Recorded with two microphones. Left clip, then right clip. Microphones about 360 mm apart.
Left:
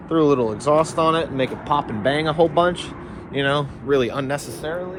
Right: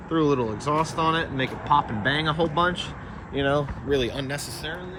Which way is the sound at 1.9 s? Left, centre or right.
Left.